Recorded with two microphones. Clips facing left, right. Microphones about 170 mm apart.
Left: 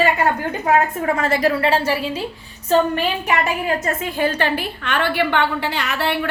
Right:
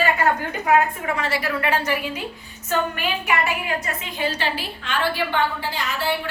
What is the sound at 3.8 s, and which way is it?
A woman's voice, 50° left (ahead or behind).